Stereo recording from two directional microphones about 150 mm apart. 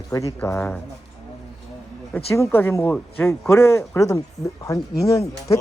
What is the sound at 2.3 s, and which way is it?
Speech, 15° left (ahead or behind).